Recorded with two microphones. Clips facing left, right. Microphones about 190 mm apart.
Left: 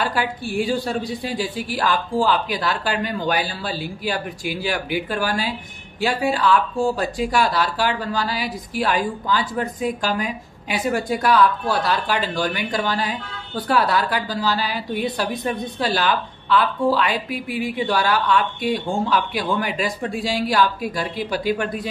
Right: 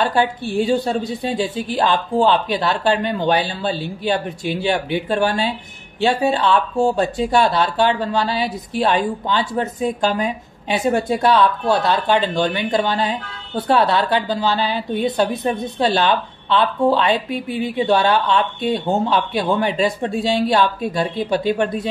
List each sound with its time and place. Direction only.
0.0 s speech: 25° right (ahead or behind)